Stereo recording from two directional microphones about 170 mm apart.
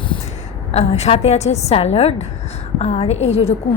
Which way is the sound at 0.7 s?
40° left (ahead or behind).